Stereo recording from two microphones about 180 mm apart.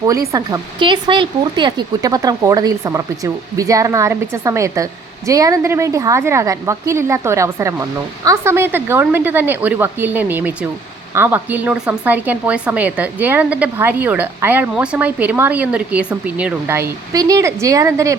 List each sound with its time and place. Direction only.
0.0 s a woman's voice: 15° right (ahead or behind)